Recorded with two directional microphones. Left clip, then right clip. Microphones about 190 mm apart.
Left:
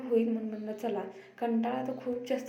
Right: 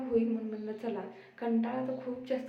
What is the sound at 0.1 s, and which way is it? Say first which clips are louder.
A woman's voice: left 2 dB; 15° left (ahead or behind).